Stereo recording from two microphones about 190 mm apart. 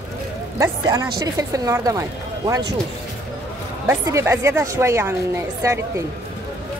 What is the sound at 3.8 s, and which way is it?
Speech, 15° right (ahead or behind).